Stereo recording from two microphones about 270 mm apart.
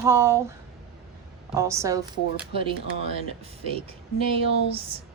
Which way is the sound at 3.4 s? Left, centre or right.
Right.